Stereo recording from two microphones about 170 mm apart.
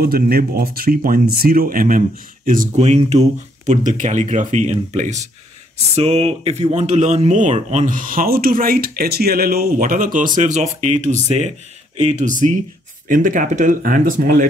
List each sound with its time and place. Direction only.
0.0 s speech: 65° right (ahead or behind)